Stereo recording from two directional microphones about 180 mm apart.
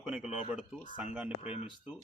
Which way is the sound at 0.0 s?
5° right (ahead or behind).